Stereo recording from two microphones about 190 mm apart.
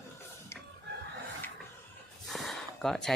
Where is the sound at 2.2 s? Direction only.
Centre (ahead or behind).